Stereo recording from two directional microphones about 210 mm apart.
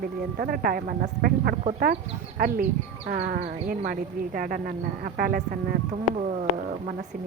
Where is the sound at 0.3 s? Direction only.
45° right (ahead or behind).